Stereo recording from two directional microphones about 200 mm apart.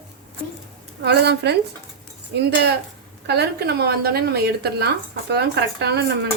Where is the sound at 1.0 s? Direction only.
55° right (ahead or behind).